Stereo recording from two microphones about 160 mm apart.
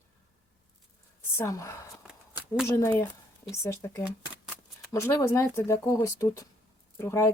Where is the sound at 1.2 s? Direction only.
15° left (ahead or behind).